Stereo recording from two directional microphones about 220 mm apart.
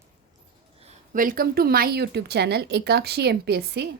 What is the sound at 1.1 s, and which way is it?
Speech, 40° right (ahead or behind).